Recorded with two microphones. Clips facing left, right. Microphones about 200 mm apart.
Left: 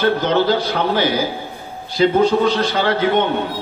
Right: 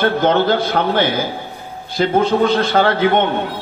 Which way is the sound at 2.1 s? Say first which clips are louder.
Right 4 dB; 55° right (ahead or behind).